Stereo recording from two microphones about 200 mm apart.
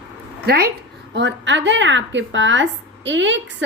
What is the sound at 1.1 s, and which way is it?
Speech, 65° right (ahead or behind).